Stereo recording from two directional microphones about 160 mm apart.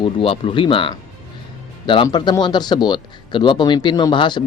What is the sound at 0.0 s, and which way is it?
Speech, 35° left (ahead or behind).